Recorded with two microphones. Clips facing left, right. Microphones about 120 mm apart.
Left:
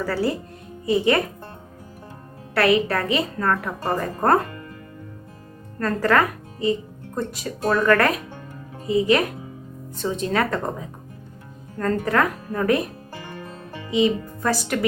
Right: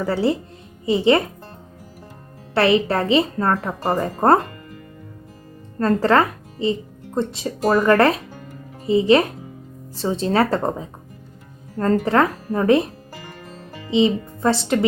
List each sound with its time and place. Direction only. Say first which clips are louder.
0.0 s a woman's voice: right 3 dB; 25° right (ahead or behind)
2.6 s a woman's voice: right 2 dB; 25° right (ahead or behind)
5.8 s a woman's voice: right 3 dB; 25° right (ahead or behind)
12.0 s a woman's voice: right 3 dB; 30° right (ahead or behind)
13.9 s a woman's voice: right 2 dB; 25° right (ahead or behind)